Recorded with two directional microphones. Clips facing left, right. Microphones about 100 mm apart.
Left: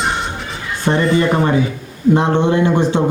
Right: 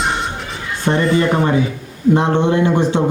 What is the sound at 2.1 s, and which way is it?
Speech, 30° left (ahead or behind).